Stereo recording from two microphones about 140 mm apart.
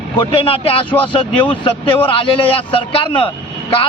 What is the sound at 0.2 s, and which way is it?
A man's voice, 40° left (ahead or behind).